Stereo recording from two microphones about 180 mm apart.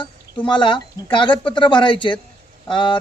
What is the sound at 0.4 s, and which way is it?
Speech, 25° left (ahead or behind).